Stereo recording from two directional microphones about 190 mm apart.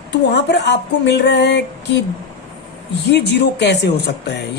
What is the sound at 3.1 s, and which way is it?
A man's voice, 60° left (ahead or behind).